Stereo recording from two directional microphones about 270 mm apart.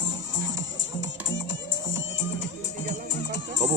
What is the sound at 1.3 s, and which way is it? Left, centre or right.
Music, left.